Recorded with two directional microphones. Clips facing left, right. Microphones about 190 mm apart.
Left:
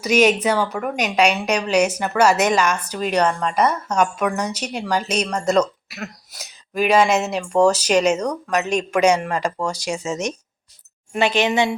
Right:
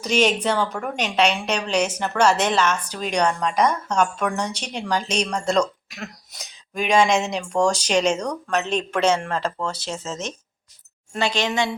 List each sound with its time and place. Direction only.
0.0 s a woman's voice: 10° left (ahead or behind)